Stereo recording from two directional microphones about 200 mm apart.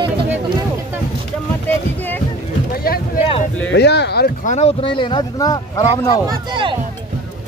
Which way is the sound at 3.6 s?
60° left (ahead or behind).